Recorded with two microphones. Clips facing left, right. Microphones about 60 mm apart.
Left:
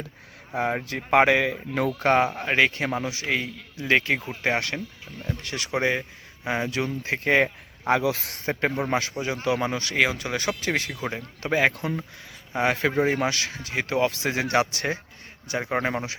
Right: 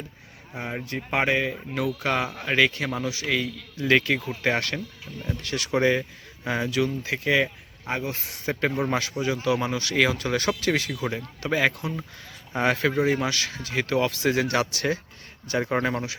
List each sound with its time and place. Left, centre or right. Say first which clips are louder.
0.5 s speech: left 5 dB; left
1.9 s a man's voice: left 7 dB; left; by 4.8 s centre
5.1 s speech: right 2 dB; centre
5.4 s a man's voice: right 3 dB; left
7.9 s a man's voice: left 7 dB; left
8.4 s a man's voice: even; left
10.0 s a man's voice: right 1 dB; centre
10.6 s a man's voice: right 2 dB; left
12.7 s a man's voice: even; left
15.4 s speech: right 2 dB; centre
15.8 s a man's voice: even; left